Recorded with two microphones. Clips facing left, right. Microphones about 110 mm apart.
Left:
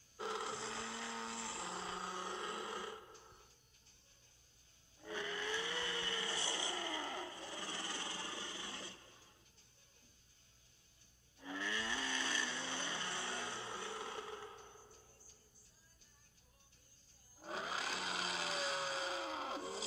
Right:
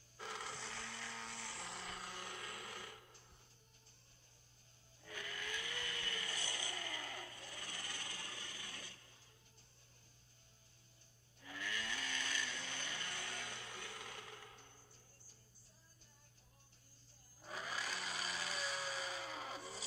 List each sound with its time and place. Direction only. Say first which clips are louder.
0.2 s vehicle: left 6 dB; 25° left (ahead or behind)
5.0 s vehicle: left 7 dB; 25° left (ahead or behind)
11.3 s vehicle: left 4 dB; 25° left (ahead or behind)
17.4 s blender: left 3 dB; 25° left (ahead or behind)